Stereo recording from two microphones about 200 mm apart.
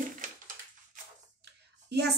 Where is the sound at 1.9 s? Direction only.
55° right (ahead or behind).